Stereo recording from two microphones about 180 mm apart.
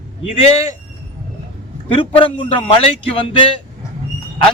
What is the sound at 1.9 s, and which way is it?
A man's voice, 30° left (ahead or behind).